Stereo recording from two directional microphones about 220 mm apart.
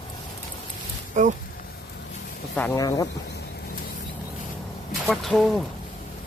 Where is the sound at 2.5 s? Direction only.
10° left (ahead or behind).